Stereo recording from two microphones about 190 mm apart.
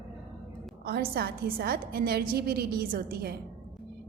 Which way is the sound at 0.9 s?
55° right (ahead or behind).